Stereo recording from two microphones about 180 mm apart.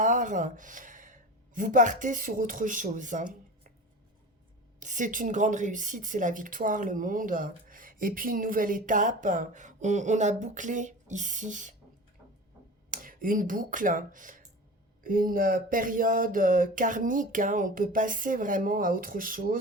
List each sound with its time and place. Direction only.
0.0 s speech: 45° right (ahead or behind)
4.8 s a woman's voice: 45° right (ahead or behind)
12.9 s a woman's voice: 50° right (ahead or behind)